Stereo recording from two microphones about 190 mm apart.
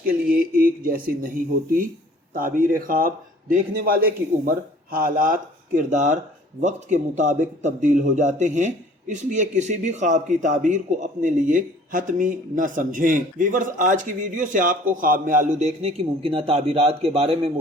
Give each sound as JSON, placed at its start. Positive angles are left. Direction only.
{"t": 0.3, "sound": "speech", "side_deg": -50}
{"t": 2.3, "sound": "speech", "side_deg": -45}